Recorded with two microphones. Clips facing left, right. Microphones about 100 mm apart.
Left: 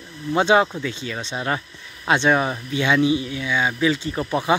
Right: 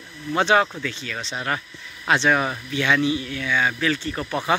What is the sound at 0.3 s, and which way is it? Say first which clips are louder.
Speech: left 2 dB; 20° left (ahead or behind).